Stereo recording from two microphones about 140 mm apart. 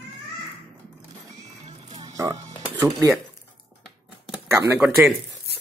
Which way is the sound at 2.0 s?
25° right (ahead or behind).